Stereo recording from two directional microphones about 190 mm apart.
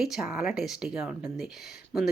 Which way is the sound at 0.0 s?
Centre (ahead or behind).